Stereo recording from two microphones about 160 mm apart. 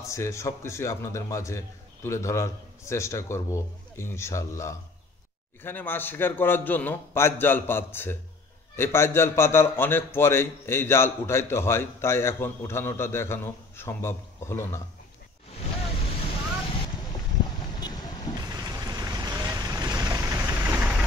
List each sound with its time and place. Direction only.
0.0 s a man's voice: 20° left (ahead or behind)
17.7 s vehicle: 25° left (ahead or behind)
18.4 s vehicle: 25° right (ahead or behind)